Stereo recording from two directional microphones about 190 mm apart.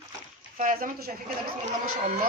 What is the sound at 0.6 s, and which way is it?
Speech, 45° right (ahead or behind).